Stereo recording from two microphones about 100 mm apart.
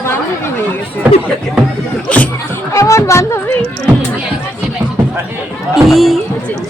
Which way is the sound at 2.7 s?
30° left (ahead or behind).